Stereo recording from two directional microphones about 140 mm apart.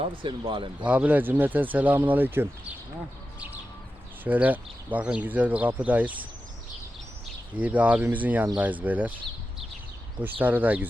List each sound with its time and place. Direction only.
0.0 s speech: 35° right (ahead or behind)
0.9 s speech: 10° right (ahead or behind)
4.2 s speech: 10° right (ahead or behind)
7.5 s speech: 10° right (ahead or behind)
10.2 s speech: 10° right (ahead or behind)